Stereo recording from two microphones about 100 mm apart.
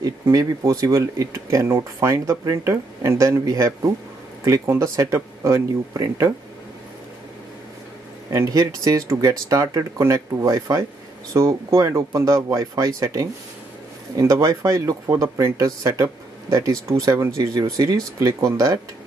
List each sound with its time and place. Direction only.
0.0 s speech: 35° right (ahead or behind)
8.3 s speech: 35° right (ahead or behind)